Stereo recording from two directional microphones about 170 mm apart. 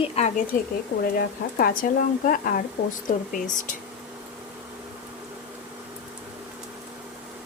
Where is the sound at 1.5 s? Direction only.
55° left (ahead or behind).